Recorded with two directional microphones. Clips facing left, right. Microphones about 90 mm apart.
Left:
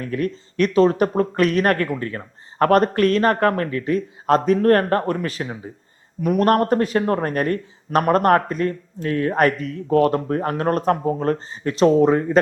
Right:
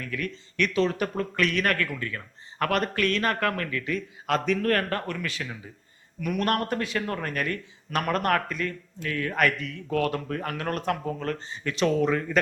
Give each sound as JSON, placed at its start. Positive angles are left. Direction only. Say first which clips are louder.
{"t": 0.0, "sound": "speech", "louder": "left 9 dB", "side_deg": 35}